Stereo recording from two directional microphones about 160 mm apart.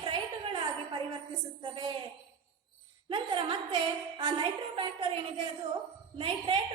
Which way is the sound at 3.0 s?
30° right (ahead or behind).